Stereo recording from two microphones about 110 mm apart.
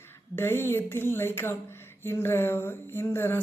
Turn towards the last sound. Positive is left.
turn(degrees=20)  # may be behind; listen again after turning